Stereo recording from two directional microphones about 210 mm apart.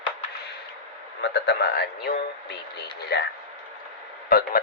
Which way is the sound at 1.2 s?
55° left (ahead or behind).